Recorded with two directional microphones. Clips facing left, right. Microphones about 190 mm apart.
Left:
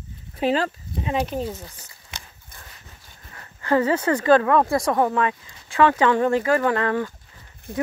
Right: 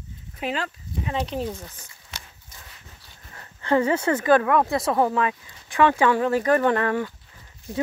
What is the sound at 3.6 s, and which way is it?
Speech, 20° right (ahead or behind).